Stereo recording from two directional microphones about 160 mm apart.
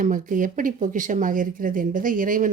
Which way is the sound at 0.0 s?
55° right (ahead or behind).